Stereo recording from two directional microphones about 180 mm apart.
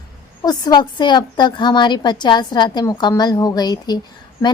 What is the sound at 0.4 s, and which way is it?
A woman's voice, 20° left (ahead or behind).